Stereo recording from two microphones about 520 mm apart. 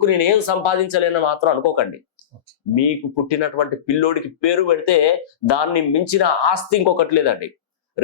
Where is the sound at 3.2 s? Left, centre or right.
Left.